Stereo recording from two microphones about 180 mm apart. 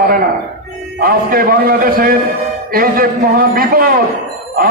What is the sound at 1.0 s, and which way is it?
A man's voice, 55° right (ahead or behind).